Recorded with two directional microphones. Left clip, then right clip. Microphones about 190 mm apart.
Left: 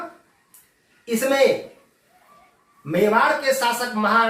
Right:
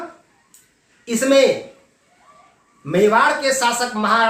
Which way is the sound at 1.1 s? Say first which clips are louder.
Right 1 dB; 20° right (ahead or behind).